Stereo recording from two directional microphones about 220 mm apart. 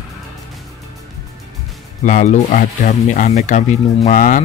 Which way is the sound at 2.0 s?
35° left (ahead or behind).